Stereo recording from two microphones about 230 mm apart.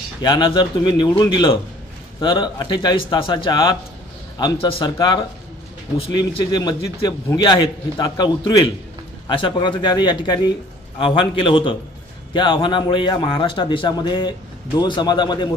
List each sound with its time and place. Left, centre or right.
0.2 s a man's voice: centre